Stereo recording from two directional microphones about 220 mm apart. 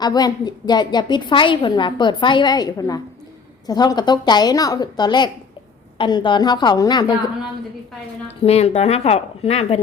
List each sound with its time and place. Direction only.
0.0 s a woman's voice: 20° left (ahead or behind)
8.4 s a woman's voice: 25° left (ahead or behind)